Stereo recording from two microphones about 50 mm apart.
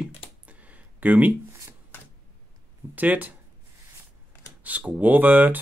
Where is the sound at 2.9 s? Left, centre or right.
Right.